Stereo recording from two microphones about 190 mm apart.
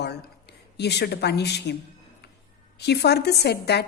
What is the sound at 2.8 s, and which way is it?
A woman's voice, 60° left (ahead or behind).